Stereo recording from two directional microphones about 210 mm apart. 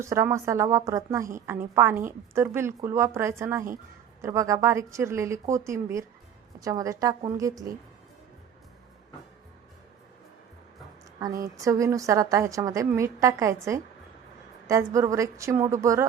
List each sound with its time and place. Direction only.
0.0 s a woman's voice: 15° right (ahead or behind)
11.2 s a woman's voice: 15° right (ahead or behind)